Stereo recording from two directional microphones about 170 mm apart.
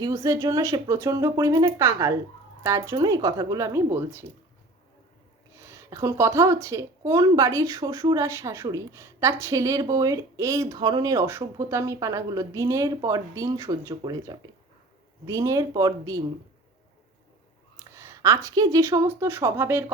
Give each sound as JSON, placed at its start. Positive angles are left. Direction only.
{"t": 0.0, "sound": "speech", "side_deg": -20}
{"t": 5.5, "sound": "a woman's voice", "side_deg": -15}
{"t": 17.7, "sound": "speech", "side_deg": -15}